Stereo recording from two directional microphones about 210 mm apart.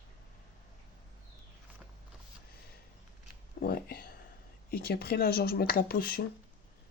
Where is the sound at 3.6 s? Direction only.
45° left (ahead or behind).